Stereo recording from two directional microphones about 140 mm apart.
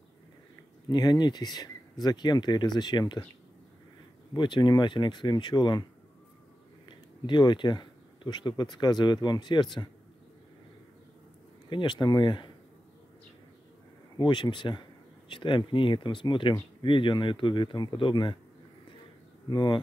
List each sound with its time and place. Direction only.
0.8 s speech: 30° left (ahead or behind)
4.3 s speech: 35° left (ahead or behind)
6.9 s speech: 35° left (ahead or behind)
11.7 s speech: 35° left (ahead or behind)
14.1 s speech: 35° left (ahead or behind)
19.5 s speech: 35° left (ahead or behind)